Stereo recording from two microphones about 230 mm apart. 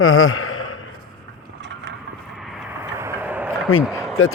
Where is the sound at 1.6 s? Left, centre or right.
Right.